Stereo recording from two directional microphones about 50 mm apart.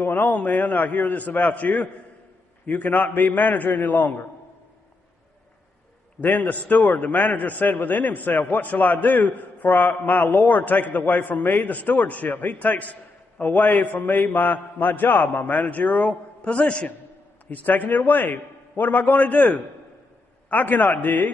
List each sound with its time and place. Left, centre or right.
0.0 s a man's voice: left
6.2 s a man's voice: left
17.5 s a man's voice: left